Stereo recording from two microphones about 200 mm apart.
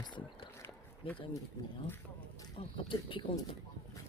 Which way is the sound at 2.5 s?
25° left (ahead or behind).